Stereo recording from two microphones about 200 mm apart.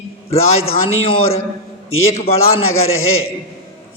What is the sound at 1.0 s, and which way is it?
A man's voice, 30° left (ahead or behind).